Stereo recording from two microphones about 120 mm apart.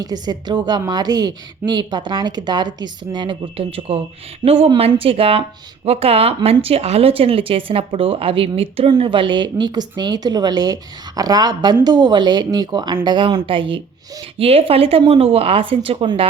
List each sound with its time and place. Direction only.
0.0 s speech: 35° right (ahead or behind); by 16.0 s 50° right (ahead or behind)